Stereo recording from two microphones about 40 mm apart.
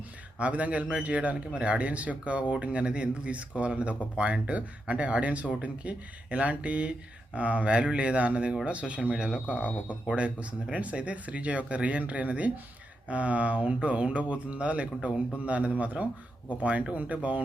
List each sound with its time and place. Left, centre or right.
0.3 s a man's voice: right